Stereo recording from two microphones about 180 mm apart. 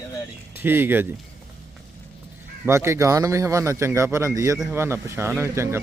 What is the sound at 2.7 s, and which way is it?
Speech, 15° right (ahead or behind).